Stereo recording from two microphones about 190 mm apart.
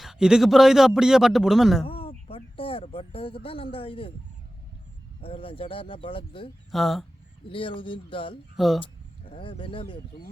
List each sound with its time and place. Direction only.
0.0 s a man's voice: 5° right (ahead or behind)
1.8 s speech: 30° left (ahead or behind)
5.2 s speech: 30° left (ahead or behind)
6.7 s a man's voice: centre (ahead or behind)
7.5 s speech: 25° left (ahead or behind)
8.5 s a man's voice: centre (ahead or behind)
8.8 s speech: 30° left (ahead or behind)